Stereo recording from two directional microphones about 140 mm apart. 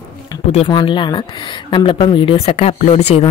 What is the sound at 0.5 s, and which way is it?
A woman's voice, 40° left (ahead or behind).